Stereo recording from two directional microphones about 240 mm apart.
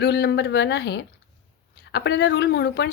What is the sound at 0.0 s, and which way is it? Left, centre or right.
A woman's voice, left.